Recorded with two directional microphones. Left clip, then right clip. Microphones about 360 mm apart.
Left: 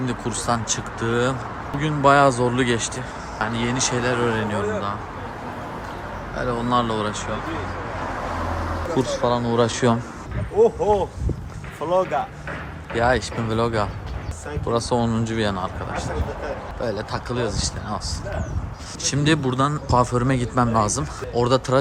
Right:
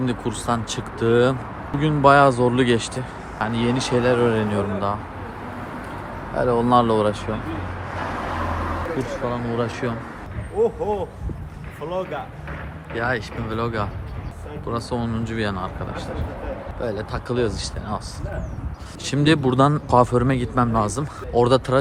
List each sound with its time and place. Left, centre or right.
0.0 s speech: centre
6.3 s speech: centre
8.4 s vehicle: right
9.0 s speech: centre
10.6 s speech: left
13.0 s speech: centre
19.0 s speech: centre